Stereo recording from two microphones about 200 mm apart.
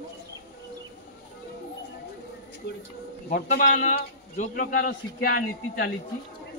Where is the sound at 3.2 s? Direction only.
45° left (ahead or behind).